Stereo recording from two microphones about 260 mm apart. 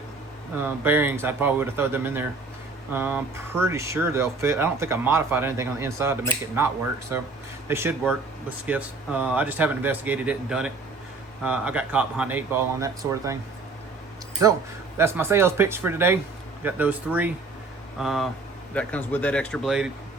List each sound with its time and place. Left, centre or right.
0.5 s speech: centre
14.9 s speech: centre